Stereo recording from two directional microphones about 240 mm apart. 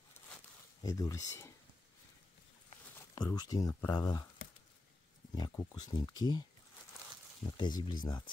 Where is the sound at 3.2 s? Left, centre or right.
Centre.